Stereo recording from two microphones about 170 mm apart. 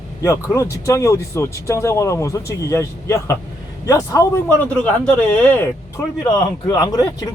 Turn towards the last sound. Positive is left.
turn(degrees=20)  # may be behind; listen again after turning